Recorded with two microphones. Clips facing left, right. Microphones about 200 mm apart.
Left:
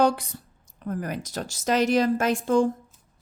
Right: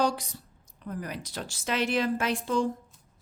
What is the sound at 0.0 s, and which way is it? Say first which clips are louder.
A woman's voice: left 5 dB; 55° left (ahead or behind).